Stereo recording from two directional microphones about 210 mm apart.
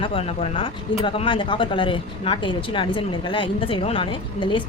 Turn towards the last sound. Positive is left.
turn(degrees=25)  # may be behind; listen again after turning